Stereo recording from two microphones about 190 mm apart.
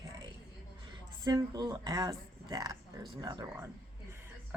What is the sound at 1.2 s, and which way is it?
Speech, 20° right (ahead or behind).